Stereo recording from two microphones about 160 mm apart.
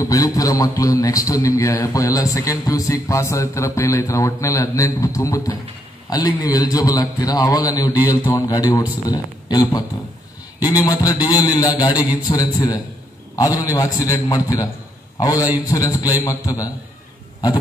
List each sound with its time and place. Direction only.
0.0 s a man's voice: 20° left (ahead or behind)